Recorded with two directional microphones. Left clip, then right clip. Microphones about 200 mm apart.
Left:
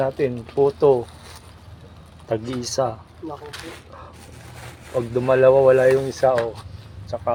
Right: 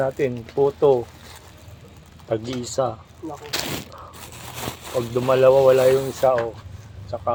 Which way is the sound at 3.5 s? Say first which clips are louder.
Right 9 dB; 40° right (ahead or behind).